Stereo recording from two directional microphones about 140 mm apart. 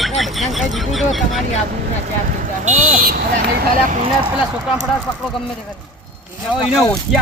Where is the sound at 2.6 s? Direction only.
70° right (ahead or behind); by 4.0 s 90° right.